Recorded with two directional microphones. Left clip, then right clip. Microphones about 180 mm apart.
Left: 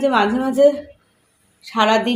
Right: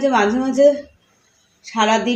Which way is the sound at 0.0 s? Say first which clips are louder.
Even; 10° left (ahead or behind).